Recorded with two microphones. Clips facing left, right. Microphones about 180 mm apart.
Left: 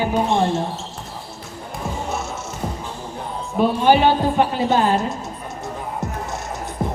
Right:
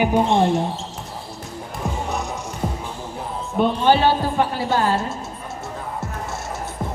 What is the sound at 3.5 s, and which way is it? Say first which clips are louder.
A woman's voice: left 2 dB; 10° left (ahead or behind).